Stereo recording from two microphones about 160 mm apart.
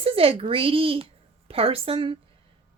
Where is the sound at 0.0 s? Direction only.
35° right (ahead or behind).